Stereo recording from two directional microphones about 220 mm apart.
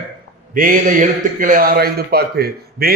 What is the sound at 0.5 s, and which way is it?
A man's voice, 40° right (ahead or behind).